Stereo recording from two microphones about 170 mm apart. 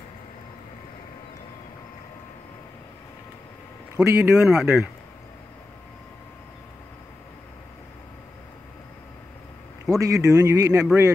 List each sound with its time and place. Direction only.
3.9 s speech: 15° right (ahead or behind)
4.4 s speech: 5° right (ahead or behind)
9.8 s speech: 20° right (ahead or behind)